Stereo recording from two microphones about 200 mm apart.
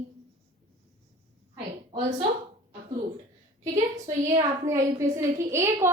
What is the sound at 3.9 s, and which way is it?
A woman's voice, 15° right (ahead or behind).